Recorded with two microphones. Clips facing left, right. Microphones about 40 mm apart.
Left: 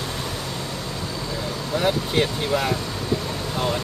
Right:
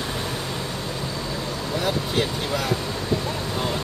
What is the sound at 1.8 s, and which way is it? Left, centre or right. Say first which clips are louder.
Speech: left 3 dB; centre.